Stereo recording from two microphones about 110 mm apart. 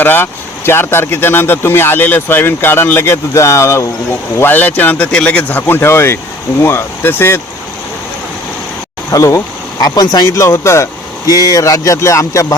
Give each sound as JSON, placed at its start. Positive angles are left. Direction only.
{"t": 0.0, "sound": "speech", "side_deg": 20}
{"t": 9.1, "sound": "speech", "side_deg": 30}